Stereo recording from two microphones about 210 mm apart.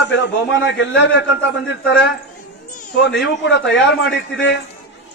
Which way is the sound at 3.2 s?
60° left (ahead or behind).